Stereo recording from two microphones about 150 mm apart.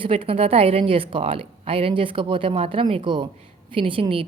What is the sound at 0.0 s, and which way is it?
A woman's voice, 40° right (ahead or behind).